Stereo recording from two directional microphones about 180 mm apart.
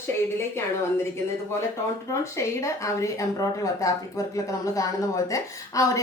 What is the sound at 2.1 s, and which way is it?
A woman's voice, 15° left (ahead or behind).